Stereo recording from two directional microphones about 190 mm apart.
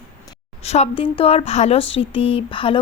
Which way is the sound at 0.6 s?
35° left (ahead or behind).